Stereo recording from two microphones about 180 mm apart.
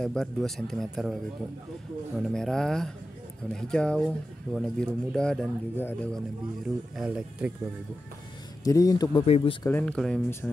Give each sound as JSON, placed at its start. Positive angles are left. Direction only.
{"t": 0.0, "sound": "speech", "side_deg": 5}
{"t": 2.1, "sound": "speech", "side_deg": 0}
{"t": 6.6, "sound": "speech", "side_deg": -5}
{"t": 8.6, "sound": "a man's voice", "side_deg": 20}
{"t": 9.2, "sound": "a man's voice", "side_deg": 30}
{"t": 9.7, "sound": "speech", "side_deg": 10}